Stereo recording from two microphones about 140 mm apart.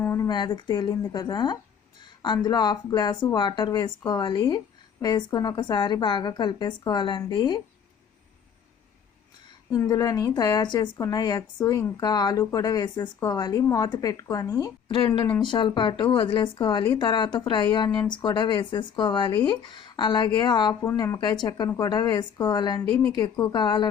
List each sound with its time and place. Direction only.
0.0 s a sound: 20° left (ahead or behind)
0.3 s a woman's voice: 35° left (ahead or behind)
9.7 s a woman's voice: 25° left (ahead or behind)
20.8 s a woman's voice: 20° left (ahead or behind)